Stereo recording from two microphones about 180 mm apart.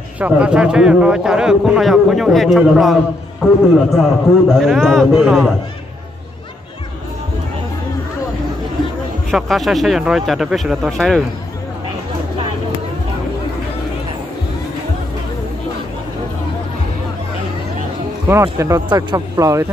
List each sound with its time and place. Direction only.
0.2 s a man's voice: 5° right (ahead or behind)
9.3 s a man's voice: centre (ahead or behind)
18.3 s speech: 15° right (ahead or behind)